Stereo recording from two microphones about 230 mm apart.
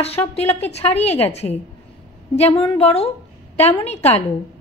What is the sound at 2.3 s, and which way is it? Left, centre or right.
A woman's voice, left.